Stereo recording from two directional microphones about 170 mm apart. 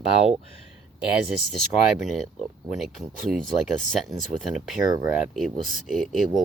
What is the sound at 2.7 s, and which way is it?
Speech, centre (ahead or behind).